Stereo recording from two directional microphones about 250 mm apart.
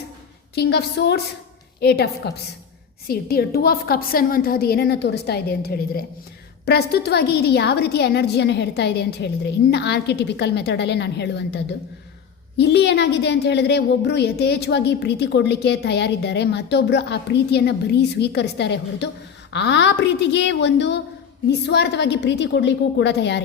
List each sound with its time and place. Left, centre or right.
0.5 s a woman's voice: left